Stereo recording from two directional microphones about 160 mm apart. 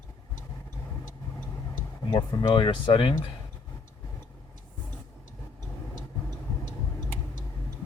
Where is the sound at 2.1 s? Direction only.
30° left (ahead or behind).